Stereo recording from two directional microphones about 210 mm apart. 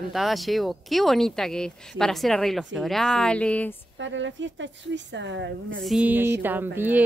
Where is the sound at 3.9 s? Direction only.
65° right (ahead or behind).